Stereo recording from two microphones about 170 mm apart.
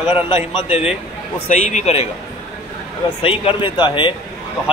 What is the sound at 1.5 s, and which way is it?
Speech, 40° left (ahead or behind).